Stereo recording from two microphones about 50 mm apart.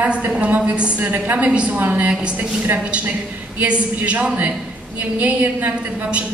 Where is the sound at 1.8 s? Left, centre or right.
Right.